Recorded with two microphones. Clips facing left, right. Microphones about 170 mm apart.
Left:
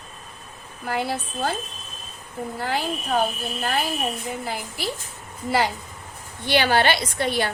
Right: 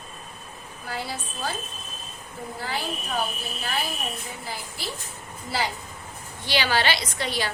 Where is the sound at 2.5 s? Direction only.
55° left (ahead or behind).